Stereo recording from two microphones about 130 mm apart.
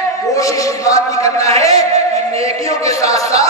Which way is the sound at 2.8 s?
25° left (ahead or behind).